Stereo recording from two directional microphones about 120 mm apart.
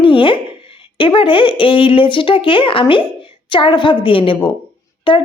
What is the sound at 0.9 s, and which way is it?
Speech, 45° left (ahead or behind).